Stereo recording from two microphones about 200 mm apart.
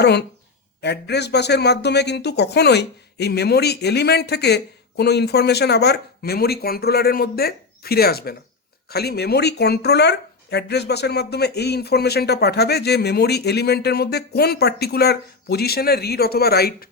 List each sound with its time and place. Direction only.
0.0 s speech: 55° left (ahead or behind)